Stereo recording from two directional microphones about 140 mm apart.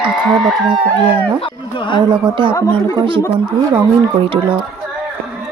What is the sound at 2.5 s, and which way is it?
Speech, 25° left (ahead or behind).